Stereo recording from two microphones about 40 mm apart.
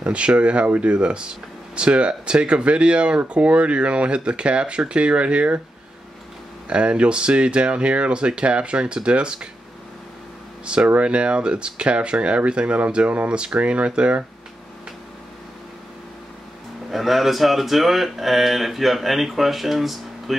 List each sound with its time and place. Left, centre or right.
0.0 s speech: right
6.7 s speech: right
10.6 s speech: right
16.9 s speech: centre